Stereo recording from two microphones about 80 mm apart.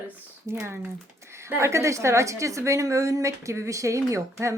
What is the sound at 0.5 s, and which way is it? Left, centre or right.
A woman's voice, right.